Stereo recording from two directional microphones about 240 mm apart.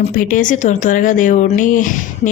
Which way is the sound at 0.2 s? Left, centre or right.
Left.